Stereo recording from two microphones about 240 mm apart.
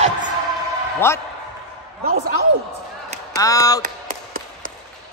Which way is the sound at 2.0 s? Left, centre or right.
Right.